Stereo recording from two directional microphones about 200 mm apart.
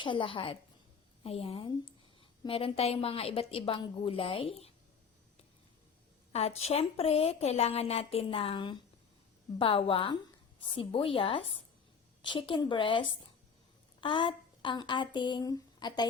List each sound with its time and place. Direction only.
0.0 s a woman's voice: 25° left (ahead or behind)
6.3 s a woman's voice: 30° left (ahead or behind)